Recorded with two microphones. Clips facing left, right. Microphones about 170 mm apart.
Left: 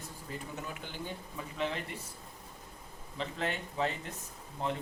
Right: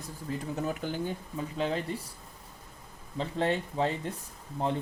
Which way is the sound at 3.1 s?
35° right (ahead or behind).